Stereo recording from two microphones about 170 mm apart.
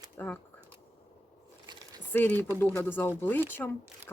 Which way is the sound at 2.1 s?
10° left (ahead or behind).